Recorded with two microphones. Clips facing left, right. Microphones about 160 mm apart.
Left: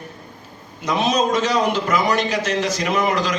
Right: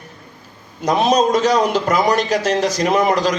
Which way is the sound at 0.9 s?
40° right (ahead or behind).